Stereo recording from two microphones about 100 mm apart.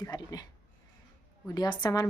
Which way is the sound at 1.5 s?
45° left (ahead or behind).